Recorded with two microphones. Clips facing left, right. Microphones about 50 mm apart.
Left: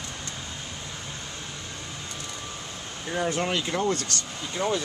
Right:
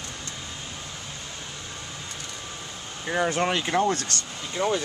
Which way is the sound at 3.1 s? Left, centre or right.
Right.